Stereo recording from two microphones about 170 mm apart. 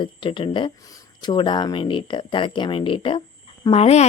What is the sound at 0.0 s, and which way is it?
A woman's voice, 30° left (ahead or behind).